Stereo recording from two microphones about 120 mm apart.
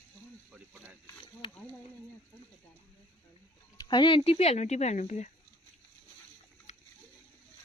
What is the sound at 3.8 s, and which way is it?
Speech, 40° left (ahead or behind).